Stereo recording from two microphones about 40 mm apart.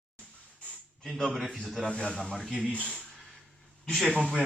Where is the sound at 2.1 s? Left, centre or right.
Centre.